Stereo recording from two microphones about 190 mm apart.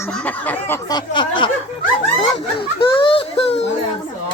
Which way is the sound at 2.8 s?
25° left (ahead or behind).